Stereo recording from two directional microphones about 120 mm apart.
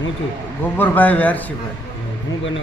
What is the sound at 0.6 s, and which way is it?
Speech, 15° left (ahead or behind).